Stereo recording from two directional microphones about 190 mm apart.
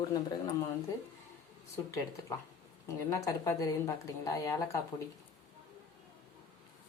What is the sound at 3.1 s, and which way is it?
A woman's voice, 15° left (ahead or behind).